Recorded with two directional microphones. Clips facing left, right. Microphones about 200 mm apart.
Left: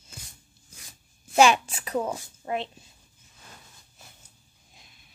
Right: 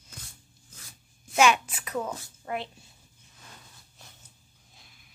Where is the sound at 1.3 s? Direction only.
30° left (ahead or behind).